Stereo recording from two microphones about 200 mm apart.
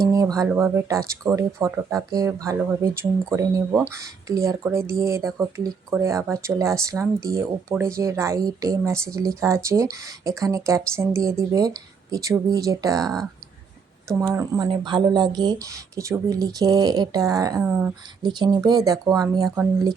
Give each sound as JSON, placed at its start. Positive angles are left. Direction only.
{"t": 0.0, "sound": "speech", "side_deg": -15}
{"t": 18.2, "sound": "speech", "side_deg": -20}